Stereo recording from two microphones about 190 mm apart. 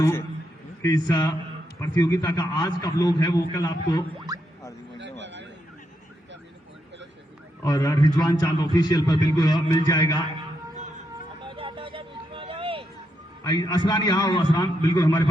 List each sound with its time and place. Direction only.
0.0 s a man's voice: 15° left (ahead or behind)
4.9 s a sound: 70° right (ahead or behind)
7.6 s a man's voice: 15° left (ahead or behind)
11.4 s vehicle: 25° right (ahead or behind)
13.4 s a man's voice: 20° left (ahead or behind)